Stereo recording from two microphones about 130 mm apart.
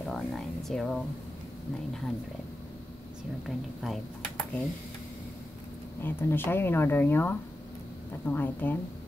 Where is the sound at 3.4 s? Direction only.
Centre (ahead or behind).